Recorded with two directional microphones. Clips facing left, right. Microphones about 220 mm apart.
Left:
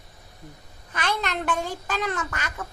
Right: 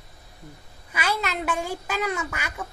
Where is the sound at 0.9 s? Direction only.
5° right (ahead or behind).